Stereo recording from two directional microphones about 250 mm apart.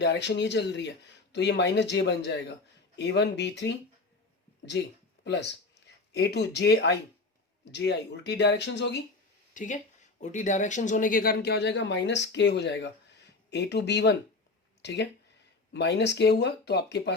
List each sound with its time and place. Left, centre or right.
0.0 s speech: left
5.2 s speech: left
9.6 s speech: left